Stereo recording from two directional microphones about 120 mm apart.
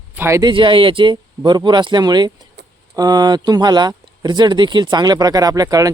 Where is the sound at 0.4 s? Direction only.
45° right (ahead or behind).